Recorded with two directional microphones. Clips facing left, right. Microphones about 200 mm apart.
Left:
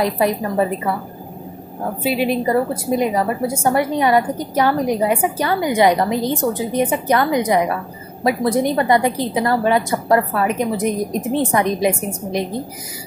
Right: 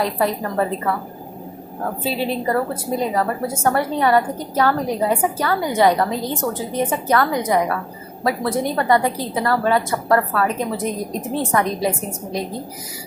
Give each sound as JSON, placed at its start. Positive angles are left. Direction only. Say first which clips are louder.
{"t": 0.0, "sound": "a woman's voice", "louder": "left 3 dB", "side_deg": 15}
{"t": 2.0, "sound": "a woman's voice", "louder": "left 4 dB", "side_deg": 15}